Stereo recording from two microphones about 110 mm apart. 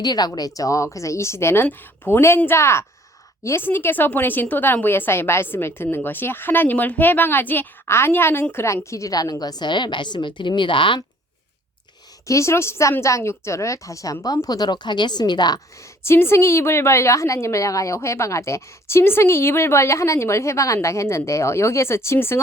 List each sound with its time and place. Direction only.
0.0 s a woman's voice: 40° left (ahead or behind)
12.2 s a woman's voice: 30° left (ahead or behind)